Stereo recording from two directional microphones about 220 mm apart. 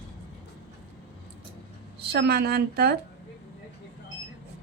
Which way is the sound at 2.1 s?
45° right (ahead or behind).